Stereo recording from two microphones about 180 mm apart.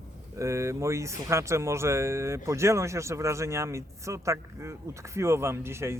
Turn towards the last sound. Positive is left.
turn(degrees=-15)  # may be behind; listen again after turning